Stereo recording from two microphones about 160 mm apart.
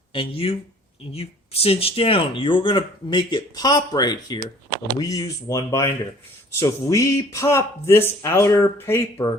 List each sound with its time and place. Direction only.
0.1 s speech: 35° left (ahead or behind); by 9.3 s 15° left (ahead or behind)